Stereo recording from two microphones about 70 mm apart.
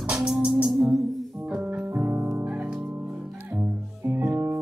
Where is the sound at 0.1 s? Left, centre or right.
Centre.